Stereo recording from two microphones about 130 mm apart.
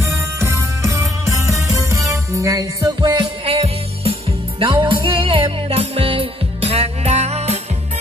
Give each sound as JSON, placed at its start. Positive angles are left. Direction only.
{"t": 0.0, "sound": "music", "side_deg": -20}
{"t": 3.4, "sound": "music", "side_deg": -50}